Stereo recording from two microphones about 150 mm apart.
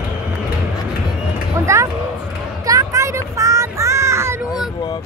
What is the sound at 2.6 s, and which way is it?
Child singing, 20° right (ahead or behind).